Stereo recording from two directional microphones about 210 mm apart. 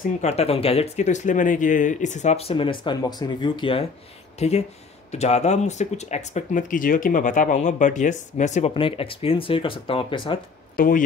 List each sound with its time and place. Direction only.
0.2 s speech: 30° left (ahead or behind)
10.8 s speech: 40° left (ahead or behind)